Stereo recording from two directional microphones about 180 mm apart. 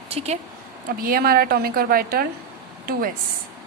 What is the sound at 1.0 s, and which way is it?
A woman's voice, 55° right (ahead or behind).